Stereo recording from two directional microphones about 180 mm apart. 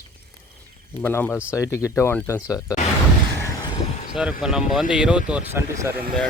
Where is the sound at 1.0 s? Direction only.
10° left (ahead or behind).